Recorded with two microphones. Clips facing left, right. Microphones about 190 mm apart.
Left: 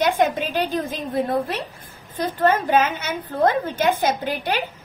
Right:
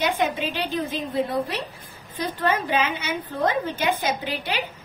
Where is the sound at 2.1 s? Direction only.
45° left (ahead or behind).